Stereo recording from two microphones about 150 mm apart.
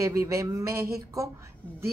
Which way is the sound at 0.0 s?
20° right (ahead or behind).